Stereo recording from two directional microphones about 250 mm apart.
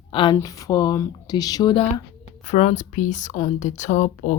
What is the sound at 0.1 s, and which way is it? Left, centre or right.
Speech, centre.